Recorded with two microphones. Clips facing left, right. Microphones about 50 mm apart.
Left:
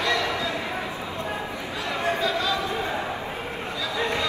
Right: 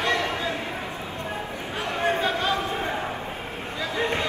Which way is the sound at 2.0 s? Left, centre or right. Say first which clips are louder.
Right 1 dB; right.